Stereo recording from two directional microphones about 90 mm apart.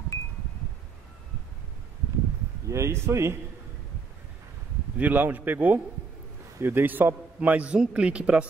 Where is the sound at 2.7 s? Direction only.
30° right (ahead or behind).